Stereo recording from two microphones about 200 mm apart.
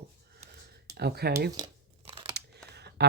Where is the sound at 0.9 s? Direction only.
55° right (ahead or behind).